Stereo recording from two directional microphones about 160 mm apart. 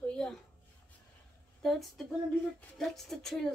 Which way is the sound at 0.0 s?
5° left (ahead or behind).